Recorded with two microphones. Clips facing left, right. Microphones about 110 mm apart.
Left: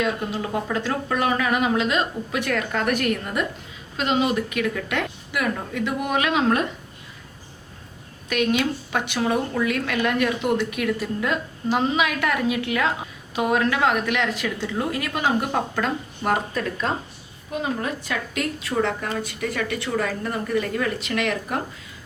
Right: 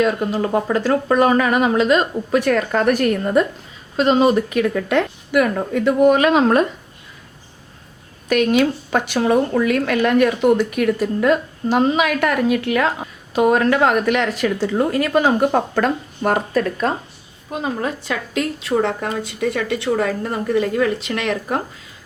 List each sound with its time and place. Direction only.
0.0 s a woman's voice: 45° right (ahead or behind)
5.3 s speech: 50° right (ahead or behind)
8.3 s speech: 45° right (ahead or behind)
17.8 s a woman's voice: 25° right (ahead or behind)